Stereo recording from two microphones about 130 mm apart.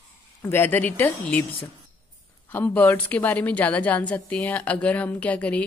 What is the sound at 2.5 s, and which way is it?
Speech, 15° left (ahead or behind).